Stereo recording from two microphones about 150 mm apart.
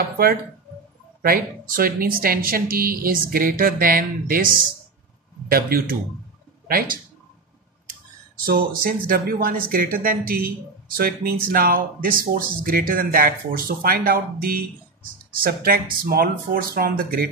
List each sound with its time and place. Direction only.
1.2 s speech: 75° right (ahead or behind)
5.5 s speech: 80° right
8.5 s speech: 75° right (ahead or behind)